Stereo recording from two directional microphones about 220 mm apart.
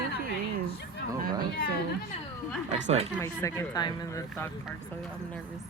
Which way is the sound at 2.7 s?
30° right (ahead or behind).